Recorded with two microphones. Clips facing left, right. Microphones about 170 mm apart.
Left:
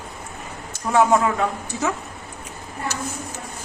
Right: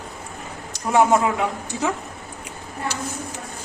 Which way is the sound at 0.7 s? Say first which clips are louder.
Even; 15° right (ahead or behind).